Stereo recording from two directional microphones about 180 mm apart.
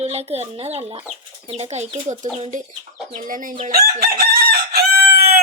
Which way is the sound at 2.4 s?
45° right (ahead or behind).